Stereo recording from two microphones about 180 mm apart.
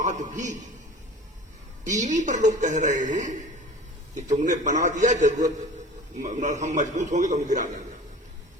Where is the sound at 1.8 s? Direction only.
45° right (ahead or behind).